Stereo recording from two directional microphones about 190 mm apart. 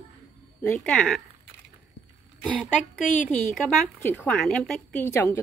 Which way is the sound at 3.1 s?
10° left (ahead or behind).